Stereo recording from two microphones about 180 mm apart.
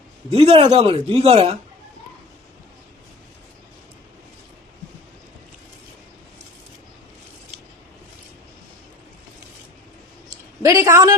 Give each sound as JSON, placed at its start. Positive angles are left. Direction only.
{"t": 0.3, "sound": "speech", "side_deg": -30}
{"t": 10.6, "sound": "a man's voice", "side_deg": -15}